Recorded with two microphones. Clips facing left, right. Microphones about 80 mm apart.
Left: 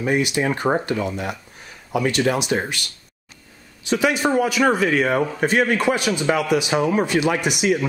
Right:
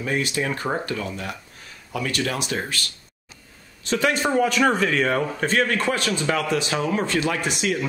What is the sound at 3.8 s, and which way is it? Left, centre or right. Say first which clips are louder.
A man's voice: left 2 dB; centre.